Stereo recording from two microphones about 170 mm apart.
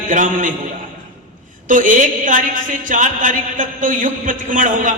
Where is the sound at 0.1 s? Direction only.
50° right (ahead or behind).